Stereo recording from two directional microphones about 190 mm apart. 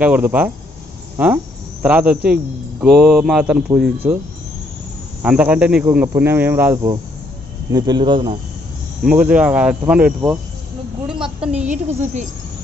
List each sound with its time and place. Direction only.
0.0 s speech: 10° right (ahead or behind)
5.2 s speech: 5° right (ahead or behind)
7.7 s speech: 20° right (ahead or behind)
9.0 s speech: 5° right (ahead or behind)
11.1 s a sound: 5° right (ahead or behind)
11.4 s a woman's voice: 35° right (ahead or behind)